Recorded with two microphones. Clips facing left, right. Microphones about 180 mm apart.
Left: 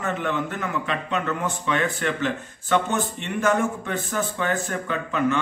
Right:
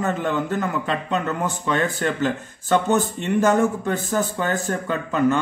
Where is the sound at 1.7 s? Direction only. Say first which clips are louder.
Right 2 dB; 40° right (ahead or behind).